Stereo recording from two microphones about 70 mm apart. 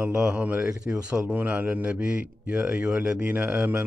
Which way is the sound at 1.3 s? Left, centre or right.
Right.